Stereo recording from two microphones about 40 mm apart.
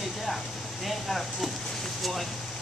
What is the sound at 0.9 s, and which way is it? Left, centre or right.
Speech, centre.